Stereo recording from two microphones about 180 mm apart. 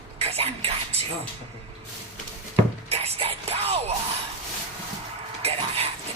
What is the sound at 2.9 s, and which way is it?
Music, 35° right (ahead or behind).